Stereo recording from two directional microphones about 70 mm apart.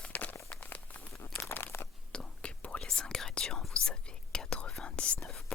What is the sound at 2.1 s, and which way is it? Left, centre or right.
Whispering, centre.